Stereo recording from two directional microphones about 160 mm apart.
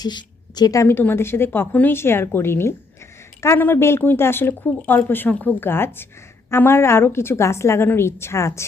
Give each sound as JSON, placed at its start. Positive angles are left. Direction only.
{"t": 0.0, "sound": "a woman's voice", "side_deg": 25}